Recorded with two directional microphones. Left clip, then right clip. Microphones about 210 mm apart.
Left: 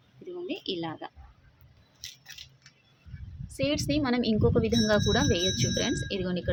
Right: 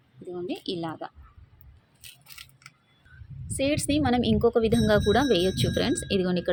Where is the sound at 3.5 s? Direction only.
15° right (ahead or behind).